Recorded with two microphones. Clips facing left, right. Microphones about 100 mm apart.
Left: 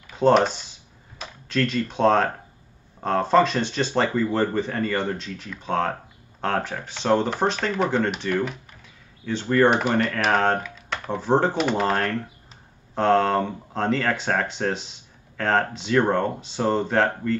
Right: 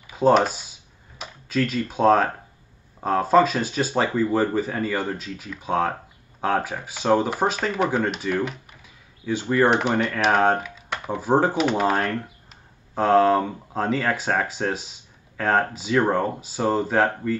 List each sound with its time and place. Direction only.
0.0 s computer keyboard: 5° right (ahead or behind)
3.0 s speech: 5° right (ahead or behind)